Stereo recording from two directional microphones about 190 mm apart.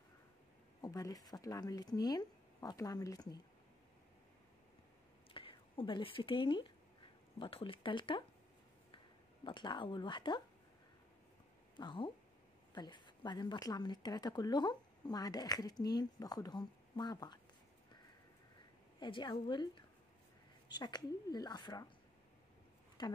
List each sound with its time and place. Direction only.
0.7 s a woman's voice: 20° left (ahead or behind)
5.3 s a woman's voice: 25° left (ahead or behind)
11.7 s a woman's voice: 25° left (ahead or behind)
18.9 s a woman's voice: 25° left (ahead or behind)
23.0 s a woman's voice: 20° left (ahead or behind)